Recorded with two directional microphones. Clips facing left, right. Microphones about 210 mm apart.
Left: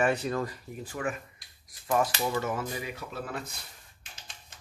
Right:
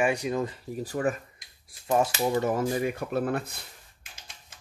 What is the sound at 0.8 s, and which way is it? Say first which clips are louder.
Speech: right 6 dB; 35° right (ahead or behind).